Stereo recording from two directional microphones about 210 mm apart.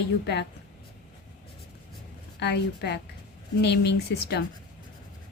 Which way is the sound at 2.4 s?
55° left (ahead or behind).